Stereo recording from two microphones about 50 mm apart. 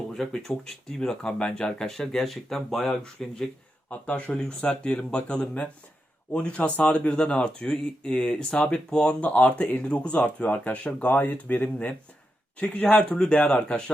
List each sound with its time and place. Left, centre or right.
0.1 s speech: centre
3.8 s speech: left
6.6 s speech: left
8.9 s speech: centre
9.2 s speech: left
13.1 s speech: centre
13.3 s speech: left